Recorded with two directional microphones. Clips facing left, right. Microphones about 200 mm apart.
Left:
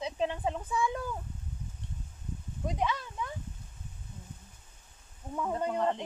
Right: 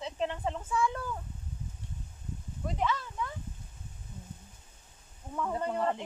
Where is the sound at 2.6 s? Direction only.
15° left (ahead or behind).